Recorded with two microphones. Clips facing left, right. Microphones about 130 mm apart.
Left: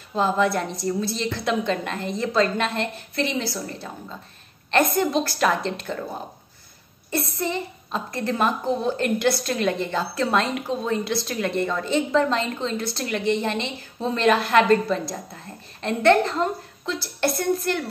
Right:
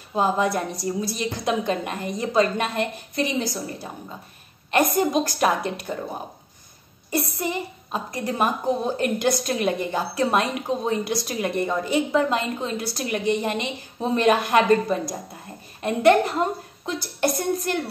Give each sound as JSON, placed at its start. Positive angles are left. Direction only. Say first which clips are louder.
{"t": 0.1, "sound": "a woman's voice", "louder": "even", "side_deg": -15}
{"t": 7.1, "sound": "a woman's voice", "louder": "even", "side_deg": -15}